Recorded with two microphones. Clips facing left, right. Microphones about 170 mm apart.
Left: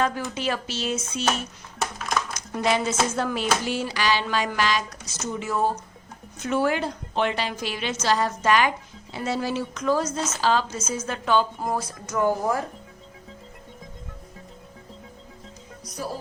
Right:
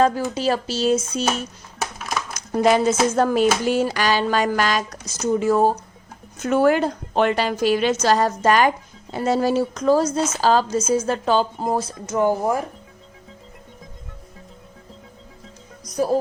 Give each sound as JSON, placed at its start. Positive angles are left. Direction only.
{"t": 0.0, "sound": "a woman's voice", "side_deg": -35}
{"t": 1.8, "sound": "a sound", "side_deg": -5}
{"t": 2.5, "sound": "a woman's voice", "side_deg": -45}
{"t": 15.8, "sound": "music", "side_deg": -40}